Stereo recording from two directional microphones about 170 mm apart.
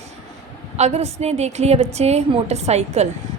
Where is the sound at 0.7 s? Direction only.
40° right (ahead or behind).